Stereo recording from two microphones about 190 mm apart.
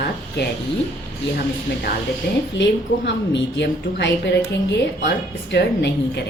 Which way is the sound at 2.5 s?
65° left (ahead or behind).